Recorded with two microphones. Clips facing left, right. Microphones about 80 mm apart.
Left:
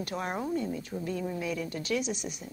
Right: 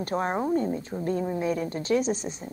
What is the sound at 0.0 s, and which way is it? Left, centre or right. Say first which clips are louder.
A woman's voice: right 6 dB; right.